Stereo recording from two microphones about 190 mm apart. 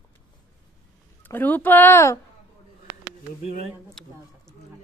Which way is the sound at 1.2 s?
10° left (ahead or behind).